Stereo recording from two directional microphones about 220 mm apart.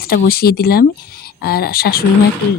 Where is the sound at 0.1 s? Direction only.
45° left (ahead or behind).